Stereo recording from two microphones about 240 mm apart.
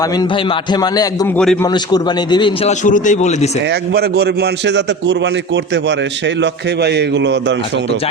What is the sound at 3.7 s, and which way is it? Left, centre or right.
A man's voice, right.